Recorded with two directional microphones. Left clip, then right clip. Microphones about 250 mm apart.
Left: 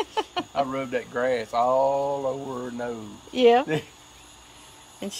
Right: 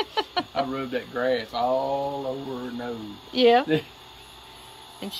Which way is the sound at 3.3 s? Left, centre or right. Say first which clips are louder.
Even; centre.